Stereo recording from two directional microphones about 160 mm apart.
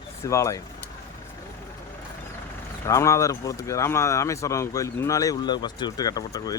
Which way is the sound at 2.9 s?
20° left (ahead or behind).